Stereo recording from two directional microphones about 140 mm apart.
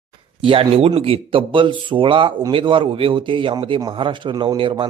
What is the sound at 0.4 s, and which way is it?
A man's voice, 40° right (ahead or behind).